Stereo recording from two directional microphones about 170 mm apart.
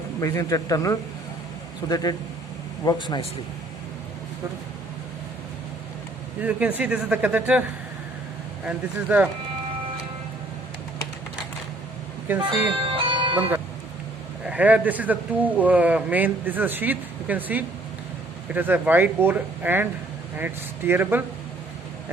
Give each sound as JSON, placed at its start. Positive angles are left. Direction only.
{"t": 0.2, "sound": "speech", "side_deg": 20}
{"t": 6.4, "sound": "speech", "side_deg": -10}
{"t": 8.6, "sound": "speech", "side_deg": -10}
{"t": 12.3, "sound": "speech", "side_deg": -10}
{"t": 12.9, "sound": "music", "side_deg": -30}
{"t": 14.5, "sound": "speech", "side_deg": -10}